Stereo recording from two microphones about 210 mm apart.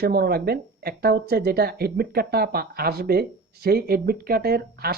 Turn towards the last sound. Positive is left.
turn(degrees=-50)  # may be behind; listen again after turning